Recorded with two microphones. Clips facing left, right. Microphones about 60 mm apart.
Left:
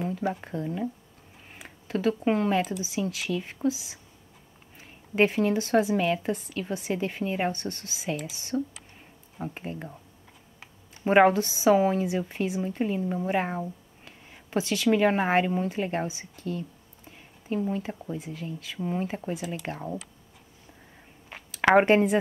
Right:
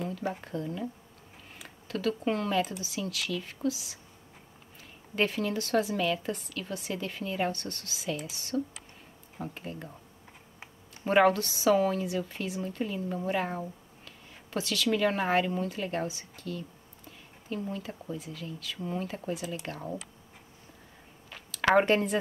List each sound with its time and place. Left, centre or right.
0.0 s a woman's voice: left
7.5 s a woman's voice: centre
11.1 s a woman's voice: left
16.4 s a sound: left
17.6 s a woman's voice: centre
21.3 s a sound: left